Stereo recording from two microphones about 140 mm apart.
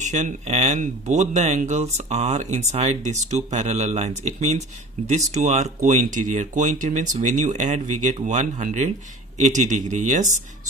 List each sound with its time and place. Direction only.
0.0 s speech: 55° right (ahead or behind)